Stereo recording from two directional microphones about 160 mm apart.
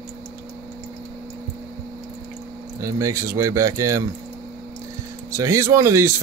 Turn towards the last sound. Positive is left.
turn(degrees=-15)  # may be behind; listen again after turning